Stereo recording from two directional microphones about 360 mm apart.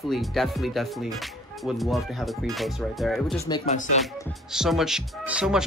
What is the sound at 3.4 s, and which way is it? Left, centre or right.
Speech, centre.